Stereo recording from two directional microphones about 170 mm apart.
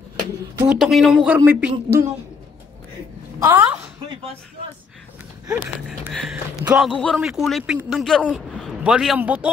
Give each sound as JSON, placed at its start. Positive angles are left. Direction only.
{"t": 0.7, "sound": "speech", "side_deg": 0}
{"t": 3.3, "sound": "speech", "side_deg": -20}
{"t": 5.9, "sound": "speech", "side_deg": -5}
{"t": 6.9, "sound": "speech", "side_deg": 5}